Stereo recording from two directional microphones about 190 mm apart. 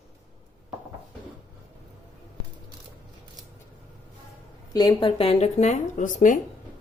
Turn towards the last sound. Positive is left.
turn(degrees=45)  # may be behind; listen again after turning